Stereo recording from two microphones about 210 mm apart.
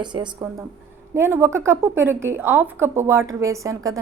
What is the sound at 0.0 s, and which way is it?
A woman's voice, 20° right (ahead or behind).